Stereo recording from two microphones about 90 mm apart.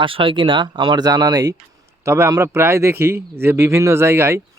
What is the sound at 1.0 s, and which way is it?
Speech, 45° right (ahead or behind).